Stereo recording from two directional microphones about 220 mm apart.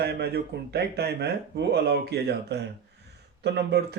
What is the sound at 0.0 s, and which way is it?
Speech, 45° right (ahead or behind).